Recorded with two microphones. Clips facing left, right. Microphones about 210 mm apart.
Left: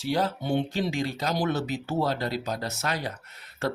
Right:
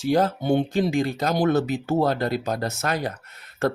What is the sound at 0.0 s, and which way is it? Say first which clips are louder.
Speech: right 6 dB; 45° right (ahead or behind).